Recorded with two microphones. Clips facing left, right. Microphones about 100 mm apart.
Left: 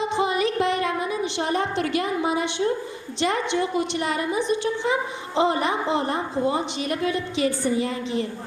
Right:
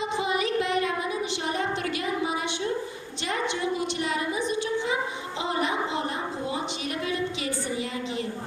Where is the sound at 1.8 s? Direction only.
45° left (ahead or behind).